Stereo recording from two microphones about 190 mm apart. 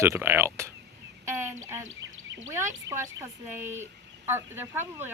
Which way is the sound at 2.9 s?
15° right (ahead or behind).